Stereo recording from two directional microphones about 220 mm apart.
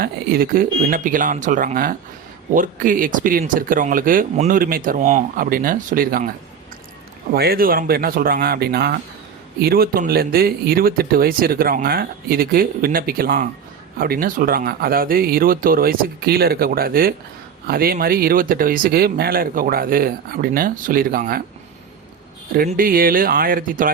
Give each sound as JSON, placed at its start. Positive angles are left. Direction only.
{"t": 0.0, "sound": "speech", "side_deg": -40}
{"t": 7.3, "sound": "speech", "side_deg": -45}
{"t": 22.5, "sound": "speech", "side_deg": -40}